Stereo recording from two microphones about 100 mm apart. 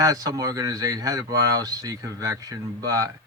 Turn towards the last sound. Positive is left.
turn(degrees=-35)  # may be behind; listen again after turning